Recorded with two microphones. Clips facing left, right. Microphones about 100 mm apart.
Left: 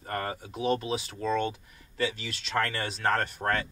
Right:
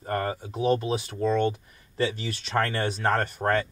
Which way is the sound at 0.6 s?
40° right (ahead or behind).